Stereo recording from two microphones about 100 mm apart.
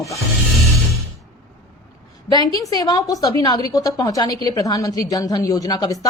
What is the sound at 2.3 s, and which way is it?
A woman's voice, 40° left (ahead or behind).